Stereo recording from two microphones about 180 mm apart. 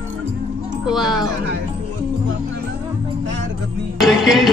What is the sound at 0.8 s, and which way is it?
Music, centre (ahead or behind).